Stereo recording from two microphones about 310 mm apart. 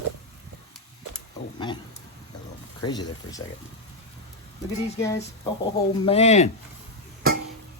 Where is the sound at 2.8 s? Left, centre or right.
Centre.